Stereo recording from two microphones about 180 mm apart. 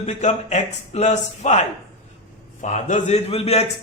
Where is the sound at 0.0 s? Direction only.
40° left (ahead or behind).